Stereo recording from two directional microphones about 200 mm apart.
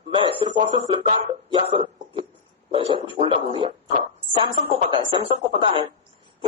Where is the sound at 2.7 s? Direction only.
25° right (ahead or behind).